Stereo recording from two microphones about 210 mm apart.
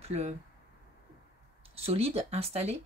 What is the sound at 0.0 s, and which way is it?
Speech, 30° right (ahead or behind).